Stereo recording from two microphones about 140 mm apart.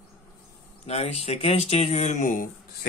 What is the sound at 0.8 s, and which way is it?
Speech, 50° left (ahead or behind).